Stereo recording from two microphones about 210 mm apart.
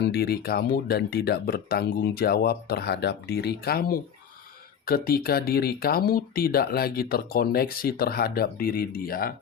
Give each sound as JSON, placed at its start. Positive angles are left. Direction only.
{"t": 0.0, "sound": "speech", "side_deg": 50}